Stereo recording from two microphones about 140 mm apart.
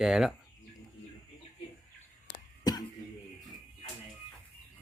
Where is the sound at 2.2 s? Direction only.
30° left (ahead or behind).